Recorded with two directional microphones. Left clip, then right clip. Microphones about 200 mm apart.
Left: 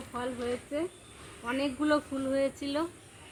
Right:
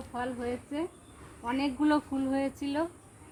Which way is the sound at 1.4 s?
25° right (ahead or behind).